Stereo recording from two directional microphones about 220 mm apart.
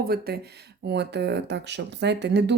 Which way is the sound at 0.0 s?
45° right (ahead or behind).